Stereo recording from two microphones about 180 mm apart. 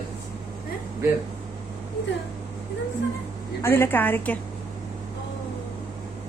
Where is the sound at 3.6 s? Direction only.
15° left (ahead or behind).